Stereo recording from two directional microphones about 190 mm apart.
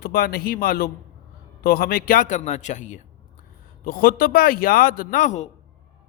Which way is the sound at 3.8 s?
50° left (ahead or behind).